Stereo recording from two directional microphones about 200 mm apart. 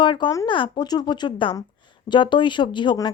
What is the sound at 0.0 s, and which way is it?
A woman's voice, 25° left (ahead or behind).